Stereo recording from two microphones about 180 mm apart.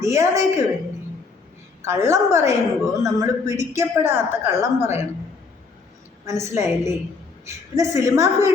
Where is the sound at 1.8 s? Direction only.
15° right (ahead or behind).